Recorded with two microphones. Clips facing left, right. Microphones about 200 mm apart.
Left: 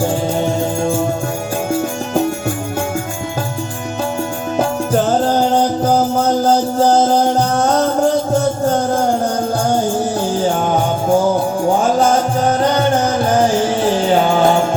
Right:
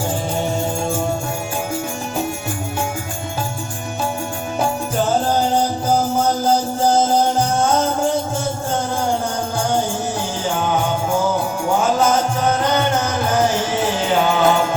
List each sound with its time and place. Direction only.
10.4 s music: 40° left (ahead or behind)